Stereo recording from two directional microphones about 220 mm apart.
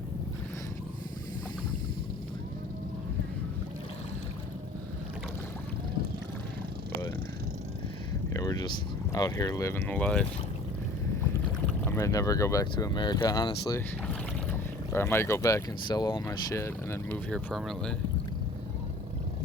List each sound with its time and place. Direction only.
8.3 s a sound: 15° left (ahead or behind)
9.1 s speech: 15° left (ahead or behind)
11.9 s speech: 15° left (ahead or behind)